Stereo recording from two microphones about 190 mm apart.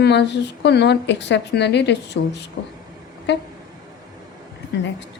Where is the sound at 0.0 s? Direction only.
65° left (ahead or behind).